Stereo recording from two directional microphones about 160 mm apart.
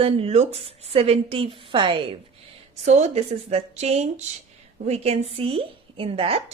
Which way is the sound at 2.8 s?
45° right (ahead or behind).